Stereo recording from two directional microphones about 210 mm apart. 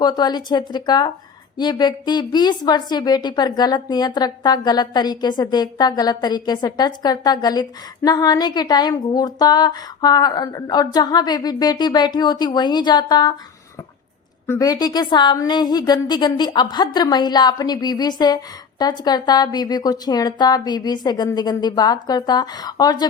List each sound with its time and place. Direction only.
0.0 s a woman's voice: 20° left (ahead or behind)
14.4 s a woman's voice: 15° left (ahead or behind)